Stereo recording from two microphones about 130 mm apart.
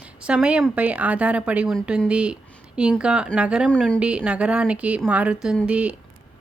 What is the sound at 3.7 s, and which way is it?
Speech, 5° left (ahead or behind).